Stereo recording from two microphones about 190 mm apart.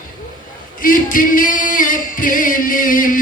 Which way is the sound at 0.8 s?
45° left (ahead or behind).